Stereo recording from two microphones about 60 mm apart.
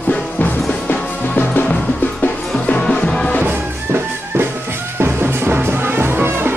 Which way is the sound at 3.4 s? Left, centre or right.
Right.